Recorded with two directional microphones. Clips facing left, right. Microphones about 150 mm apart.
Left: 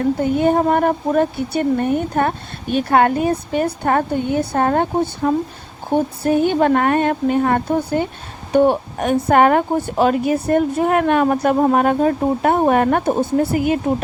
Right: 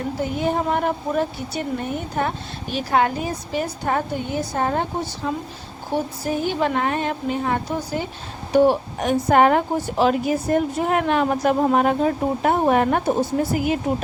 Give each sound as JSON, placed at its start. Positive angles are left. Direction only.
{"t": 0.2, "sound": "a woman's voice", "side_deg": 55}